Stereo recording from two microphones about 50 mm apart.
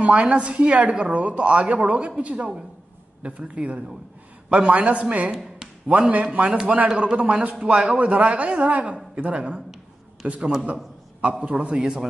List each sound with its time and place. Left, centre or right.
0.0 s a woman's voice: right
11.7 s speech: centre